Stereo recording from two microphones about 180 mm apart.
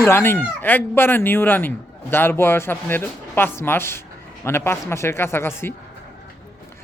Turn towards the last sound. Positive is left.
turn(degrees=15)  # may be behind; listen again after turning